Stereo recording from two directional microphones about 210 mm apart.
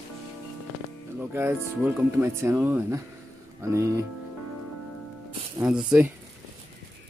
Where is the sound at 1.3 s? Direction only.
10° right (ahead or behind).